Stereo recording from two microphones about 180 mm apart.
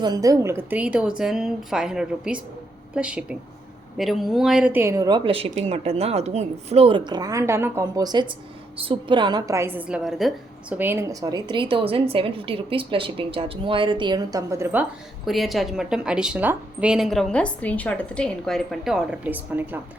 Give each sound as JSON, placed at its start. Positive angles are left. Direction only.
{"t": 0.0, "sound": "a woman's voice", "side_deg": -20}
{"t": 15.3, "sound": "a woman's voice", "side_deg": 0}